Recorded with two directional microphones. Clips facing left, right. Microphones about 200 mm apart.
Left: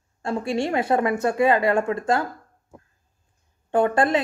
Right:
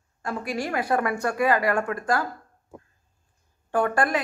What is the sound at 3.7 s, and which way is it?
Speech, 25° left (ahead or behind).